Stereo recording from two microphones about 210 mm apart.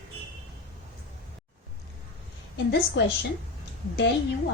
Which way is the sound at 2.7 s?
55° left (ahead or behind).